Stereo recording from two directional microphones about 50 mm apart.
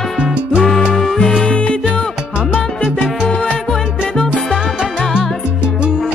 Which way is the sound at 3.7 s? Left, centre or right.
Centre.